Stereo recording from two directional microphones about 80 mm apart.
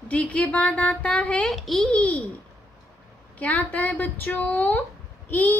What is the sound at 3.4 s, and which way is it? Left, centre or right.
A woman's voice, centre.